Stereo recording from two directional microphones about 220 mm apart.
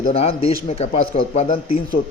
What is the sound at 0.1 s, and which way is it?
A man's voice, 25° left (ahead or behind).